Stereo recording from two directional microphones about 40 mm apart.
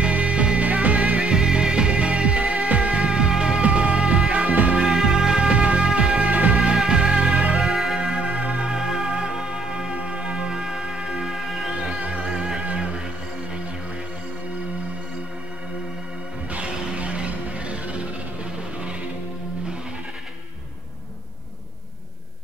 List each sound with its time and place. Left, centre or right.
0.0 s music: right
1.3 s music: centre
3.6 s music: right
4.8 s music: centre; by 6.6 s right
6.9 s music: right
7.7 s music: centre
8.1 s music: right
12.6 s music: right
16.4 s music: right